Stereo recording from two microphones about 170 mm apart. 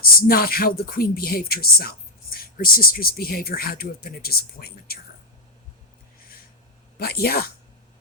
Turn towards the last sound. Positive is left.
turn(degrees=60)  # may be behind; listen again after turning